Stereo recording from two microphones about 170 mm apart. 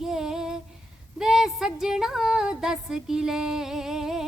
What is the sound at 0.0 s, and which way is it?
Female singing, centre (ahead or behind).